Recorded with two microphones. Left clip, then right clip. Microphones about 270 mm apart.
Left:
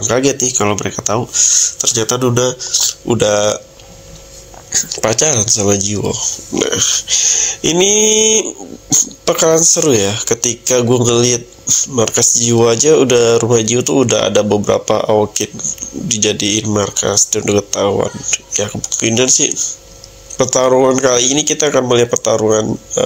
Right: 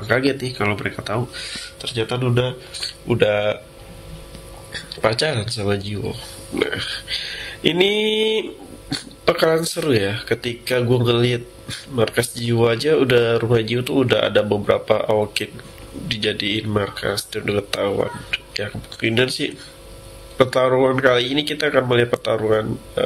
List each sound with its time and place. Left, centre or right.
0.0 s speech: left
4.7 s speech: left